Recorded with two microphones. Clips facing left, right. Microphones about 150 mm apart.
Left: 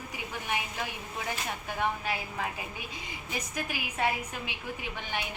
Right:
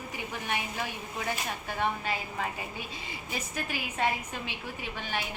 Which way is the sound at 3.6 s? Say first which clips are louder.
Right 1 dB; 15° left (ahead or behind).